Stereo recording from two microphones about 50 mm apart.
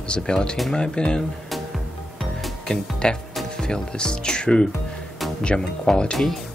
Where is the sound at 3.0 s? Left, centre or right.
Centre.